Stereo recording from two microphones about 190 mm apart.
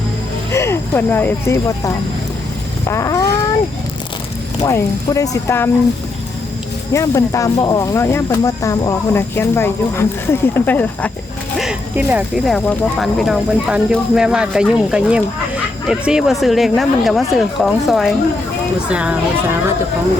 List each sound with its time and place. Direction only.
0.5 s speech: 15° left (ahead or behind)
4.6 s speech: 15° left (ahead or behind)
6.9 s speech: 15° left (ahead or behind)
11.5 s speech: 5° right (ahead or behind)